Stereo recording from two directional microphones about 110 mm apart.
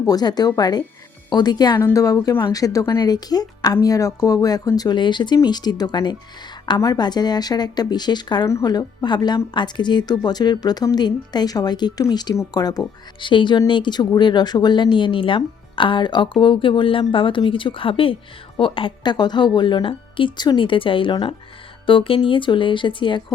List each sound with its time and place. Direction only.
0.0 s speech: 35° left (ahead or behind)
13.1 s speech: 50° left (ahead or behind)